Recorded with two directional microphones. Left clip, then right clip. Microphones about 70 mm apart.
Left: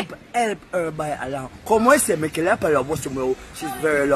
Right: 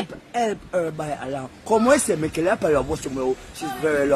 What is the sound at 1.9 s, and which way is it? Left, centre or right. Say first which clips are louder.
Speech: left 1 dB; right.